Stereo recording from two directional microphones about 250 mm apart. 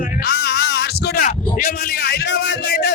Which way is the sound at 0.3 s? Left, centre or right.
Left.